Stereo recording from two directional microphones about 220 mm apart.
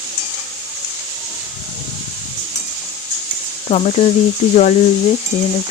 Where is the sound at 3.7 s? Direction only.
30° left (ahead or behind).